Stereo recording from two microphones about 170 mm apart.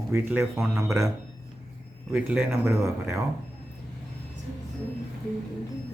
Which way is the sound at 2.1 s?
5° right (ahead or behind).